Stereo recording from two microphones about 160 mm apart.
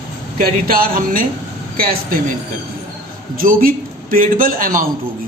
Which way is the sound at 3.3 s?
65° right (ahead or behind).